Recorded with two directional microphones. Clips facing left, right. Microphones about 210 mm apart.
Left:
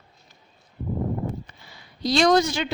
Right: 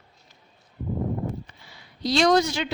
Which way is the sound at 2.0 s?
45° left (ahead or behind).